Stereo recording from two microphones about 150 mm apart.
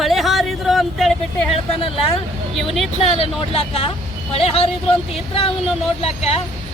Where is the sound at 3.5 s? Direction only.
40° left (ahead or behind).